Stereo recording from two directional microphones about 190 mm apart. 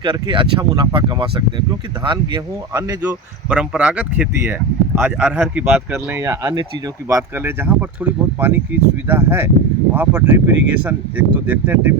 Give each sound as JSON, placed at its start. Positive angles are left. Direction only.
{"t": 0.0, "sound": "speech", "side_deg": -25}
{"t": 3.0, "sound": "speech", "side_deg": -5}